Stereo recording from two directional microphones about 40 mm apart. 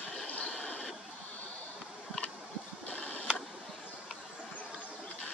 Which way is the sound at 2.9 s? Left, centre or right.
Left.